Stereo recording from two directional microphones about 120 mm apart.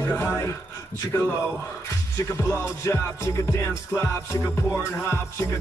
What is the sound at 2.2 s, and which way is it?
Music, 25° left (ahead or behind).